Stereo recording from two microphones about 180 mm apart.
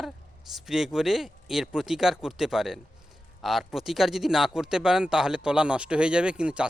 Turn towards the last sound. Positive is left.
turn(degrees=-5)  # may be behind; listen again after turning